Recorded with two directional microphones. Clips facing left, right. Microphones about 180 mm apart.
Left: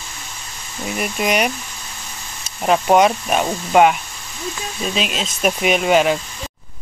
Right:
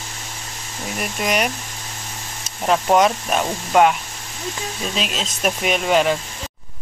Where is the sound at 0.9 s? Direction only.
5° left (ahead or behind).